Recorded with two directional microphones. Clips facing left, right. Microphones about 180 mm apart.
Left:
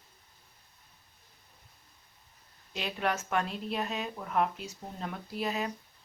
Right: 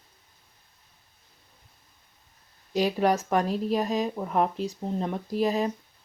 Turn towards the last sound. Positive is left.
turn(degrees=-35)  # may be behind; listen again after turning